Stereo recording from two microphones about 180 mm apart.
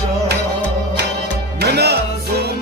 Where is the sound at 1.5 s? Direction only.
65° right (ahead or behind).